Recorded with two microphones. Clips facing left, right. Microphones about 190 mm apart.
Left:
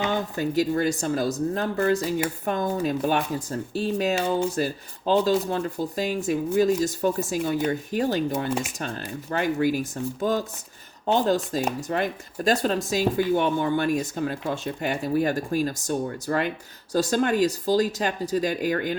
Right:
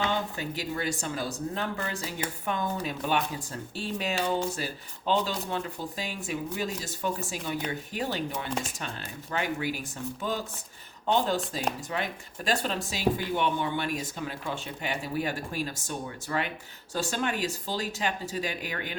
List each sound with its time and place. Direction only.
0.1 s speech: 45° left (ahead or behind)
11.0 s speech: 40° left (ahead or behind)